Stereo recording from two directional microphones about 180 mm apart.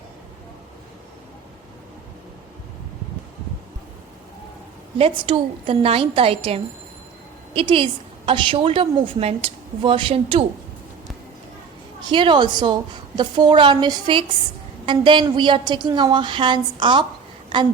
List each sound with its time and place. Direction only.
4.9 s a woman's voice: 30° right (ahead or behind)
12.0 s a woman's voice: 25° right (ahead or behind)